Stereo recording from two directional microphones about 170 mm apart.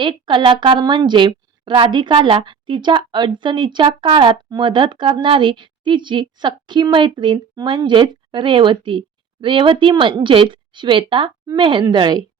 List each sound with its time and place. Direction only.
0.0 s a woman's voice: 30° right (ahead or behind)